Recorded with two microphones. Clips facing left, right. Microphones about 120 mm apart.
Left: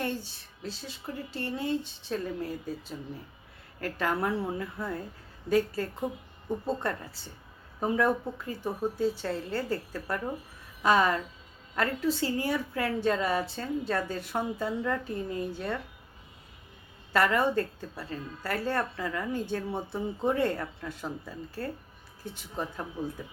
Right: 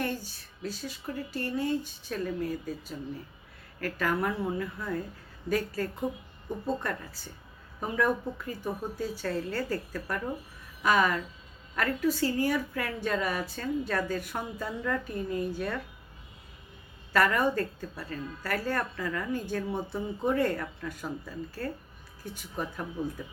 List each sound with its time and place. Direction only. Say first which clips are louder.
0.0 s a woman's voice: even; 25° left (ahead or behind)
17.1 s a woman's voice: even; 25° left (ahead or behind)